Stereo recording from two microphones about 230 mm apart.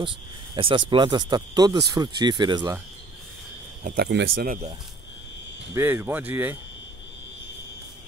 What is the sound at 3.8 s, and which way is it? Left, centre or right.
Speech, right.